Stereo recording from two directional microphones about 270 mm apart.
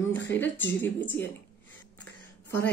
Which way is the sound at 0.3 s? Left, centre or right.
Centre.